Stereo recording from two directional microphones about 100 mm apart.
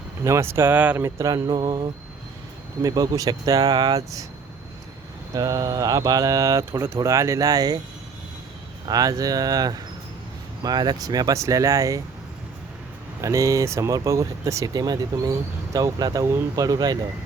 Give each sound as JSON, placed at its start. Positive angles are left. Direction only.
{"t": 0.3, "sound": "speech", "side_deg": -30}
{"t": 0.9, "sound": "speech", "side_deg": -30}
{"t": 1.5, "sound": "mantra", "side_deg": -40}
{"t": 2.8, "sound": "speech", "side_deg": -35}
{"t": 5.3, "sound": "speech", "side_deg": -35}
{"t": 8.9, "sound": "speech", "side_deg": -40}
{"t": 13.2, "sound": "speech", "side_deg": -35}
{"t": 16.6, "sound": "mantra", "side_deg": -40}